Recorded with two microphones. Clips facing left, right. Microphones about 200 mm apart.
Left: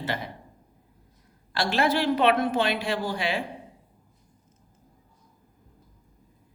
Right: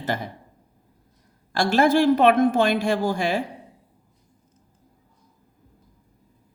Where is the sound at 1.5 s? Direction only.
45° right (ahead or behind).